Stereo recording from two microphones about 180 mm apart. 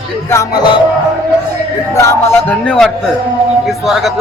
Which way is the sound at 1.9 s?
15° left (ahead or behind).